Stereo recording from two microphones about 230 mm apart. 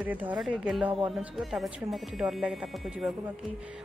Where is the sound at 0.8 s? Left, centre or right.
Right.